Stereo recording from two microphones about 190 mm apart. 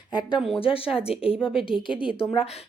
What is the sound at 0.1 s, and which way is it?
Speech, 20° left (ahead or behind).